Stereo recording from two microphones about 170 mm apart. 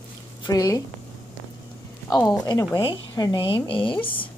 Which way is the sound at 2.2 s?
20° left (ahead or behind).